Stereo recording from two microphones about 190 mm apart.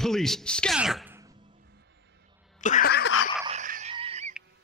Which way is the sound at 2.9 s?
60° left (ahead or behind).